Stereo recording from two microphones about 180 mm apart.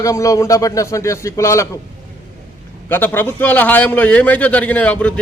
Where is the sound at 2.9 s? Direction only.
10° left (ahead or behind).